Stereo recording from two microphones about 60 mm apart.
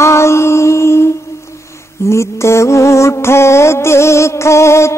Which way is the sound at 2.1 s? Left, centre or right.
Left.